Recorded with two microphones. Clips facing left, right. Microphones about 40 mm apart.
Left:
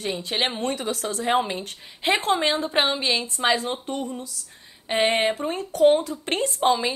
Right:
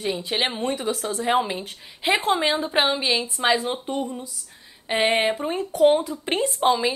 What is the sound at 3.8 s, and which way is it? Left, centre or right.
Speech, centre.